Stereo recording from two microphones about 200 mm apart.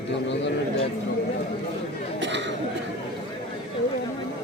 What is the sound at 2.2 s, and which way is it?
Chatter, 60° right (ahead or behind).